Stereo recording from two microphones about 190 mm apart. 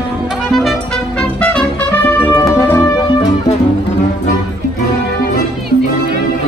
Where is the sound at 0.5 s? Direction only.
Centre (ahead or behind).